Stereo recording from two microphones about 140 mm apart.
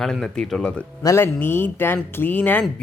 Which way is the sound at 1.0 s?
15° left (ahead or behind).